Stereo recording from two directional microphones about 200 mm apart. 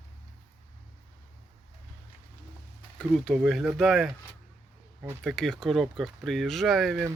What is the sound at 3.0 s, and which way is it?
Speech, centre (ahead or behind).